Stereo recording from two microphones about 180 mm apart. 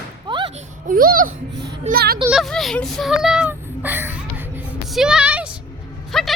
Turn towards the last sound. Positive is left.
turn(degrees=0)  # may be behind; listen again after turning